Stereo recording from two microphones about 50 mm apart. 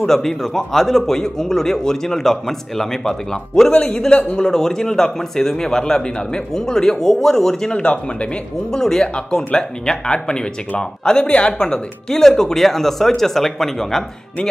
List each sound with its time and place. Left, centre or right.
0.0 s a man's voice: centre
3.7 s a man's voice: left
7.7 s speech: left
8.7 s a man's voice: centre